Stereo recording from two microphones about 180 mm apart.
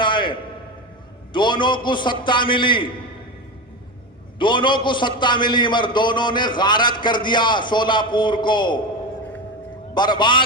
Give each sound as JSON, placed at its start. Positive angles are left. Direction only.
{"t": 0.0, "sound": "a sound", "side_deg": 25}
{"t": 1.3, "sound": "a man's voice", "side_deg": 25}
{"t": 4.4, "sound": "a man's voice", "side_deg": 25}
{"t": 9.9, "sound": "a man's voice", "side_deg": 25}